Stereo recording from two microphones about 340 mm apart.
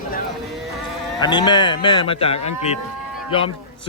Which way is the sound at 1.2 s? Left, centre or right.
Centre.